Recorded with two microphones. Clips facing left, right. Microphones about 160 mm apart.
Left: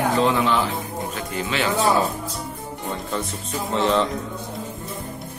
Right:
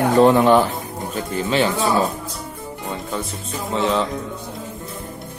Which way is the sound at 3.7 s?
5° right (ahead or behind).